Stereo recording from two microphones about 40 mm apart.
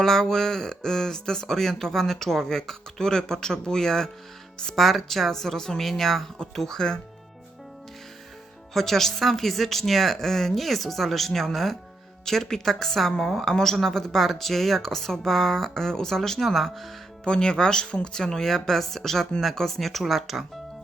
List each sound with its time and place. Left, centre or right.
0.0 s speech: centre
4.8 s speech: centre
8.7 s a woman's voice: centre
17.2 s a woman's voice: left; by 20.4 s centre